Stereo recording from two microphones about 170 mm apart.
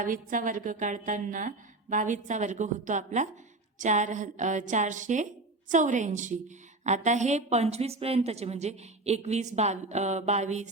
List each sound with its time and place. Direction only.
0.0 s a woman's voice: 50° right (ahead or behind)